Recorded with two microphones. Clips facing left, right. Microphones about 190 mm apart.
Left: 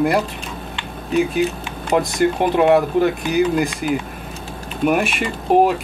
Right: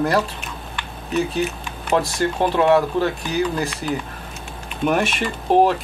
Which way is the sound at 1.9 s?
15° left (ahead or behind).